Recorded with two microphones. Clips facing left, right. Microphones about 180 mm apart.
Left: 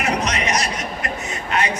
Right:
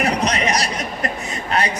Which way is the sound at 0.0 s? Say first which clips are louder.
Right 2 dB; 35° right (ahead or behind).